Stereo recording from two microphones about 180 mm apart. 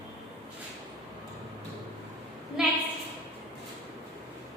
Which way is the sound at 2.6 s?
Centre (ahead or behind).